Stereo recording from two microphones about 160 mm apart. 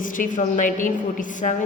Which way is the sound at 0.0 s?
55° left (ahead or behind).